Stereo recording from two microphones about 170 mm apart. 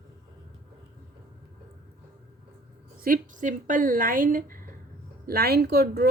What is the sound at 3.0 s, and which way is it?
Speech, 50° right (ahead or behind).